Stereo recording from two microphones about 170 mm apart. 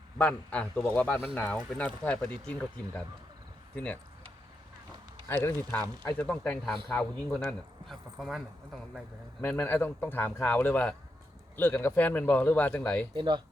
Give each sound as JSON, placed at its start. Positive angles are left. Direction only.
{"t": 0.2, "sound": "speech", "side_deg": 5}
{"t": 5.3, "sound": "speech", "side_deg": 15}
{"t": 9.4, "sound": "speech", "side_deg": 10}
{"t": 13.1, "sound": "speech", "side_deg": -25}